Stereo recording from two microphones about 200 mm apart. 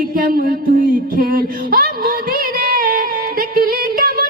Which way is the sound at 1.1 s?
45° right (ahead or behind).